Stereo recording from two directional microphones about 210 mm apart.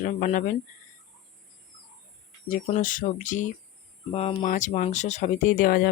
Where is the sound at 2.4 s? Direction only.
35° left (ahead or behind).